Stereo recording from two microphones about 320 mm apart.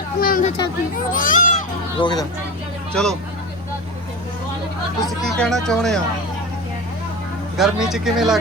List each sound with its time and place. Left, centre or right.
0.2 s a sound: left
1.1 s speech: left
2.0 s speech: centre
2.9 s speech: centre
4.9 s speech: centre
7.5 s speech: centre